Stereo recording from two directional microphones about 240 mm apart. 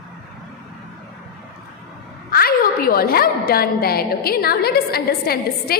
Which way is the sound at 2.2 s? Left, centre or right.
Left.